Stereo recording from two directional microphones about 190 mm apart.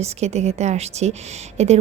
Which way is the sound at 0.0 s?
35° right (ahead or behind).